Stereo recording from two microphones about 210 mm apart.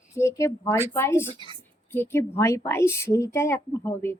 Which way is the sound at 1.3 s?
25° right (ahead or behind).